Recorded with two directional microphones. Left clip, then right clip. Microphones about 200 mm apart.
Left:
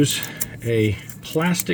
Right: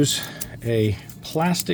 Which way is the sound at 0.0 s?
10° right (ahead or behind).